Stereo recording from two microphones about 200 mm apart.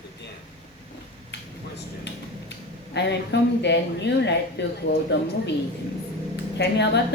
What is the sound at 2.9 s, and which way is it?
Speech, 60° left (ahead or behind).